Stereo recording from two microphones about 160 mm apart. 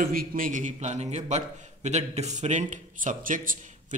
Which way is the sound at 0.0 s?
65° right (ahead or behind).